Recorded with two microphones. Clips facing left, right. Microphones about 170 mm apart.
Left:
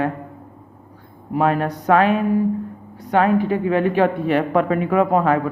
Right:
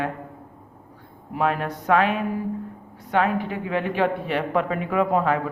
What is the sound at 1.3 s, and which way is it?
A man's voice, 40° left (ahead or behind).